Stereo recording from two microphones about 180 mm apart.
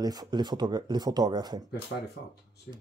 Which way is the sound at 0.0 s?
20° right (ahead or behind).